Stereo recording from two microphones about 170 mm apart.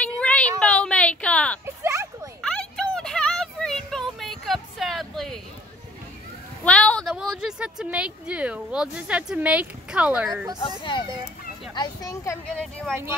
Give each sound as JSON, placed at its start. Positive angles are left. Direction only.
{"t": 0.0, "sound": "cat", "side_deg": 5}
{"t": 1.8, "sound": "a sound", "side_deg": -15}
{"t": 2.4, "sound": "music", "side_deg": 5}
{"t": 6.6, "sound": "a woman's voice", "side_deg": 5}
{"t": 10.8, "sound": "a child's voice", "side_deg": 30}
{"t": 12.5, "sound": "speech", "side_deg": 5}